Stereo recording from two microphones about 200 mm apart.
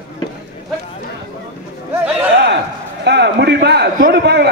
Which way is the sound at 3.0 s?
60° right (ahead or behind).